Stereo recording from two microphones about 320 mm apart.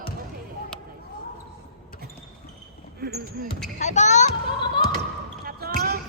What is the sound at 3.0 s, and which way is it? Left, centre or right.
Speech, right.